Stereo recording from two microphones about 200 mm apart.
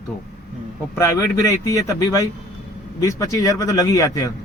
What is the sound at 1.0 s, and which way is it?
A man's voice, 15° left (ahead or behind).